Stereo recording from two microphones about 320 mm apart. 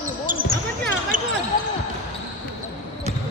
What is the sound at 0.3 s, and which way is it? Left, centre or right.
Basketball bounce, right.